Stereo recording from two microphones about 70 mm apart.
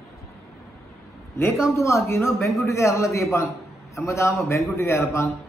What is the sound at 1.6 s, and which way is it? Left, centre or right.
A man's voice, left.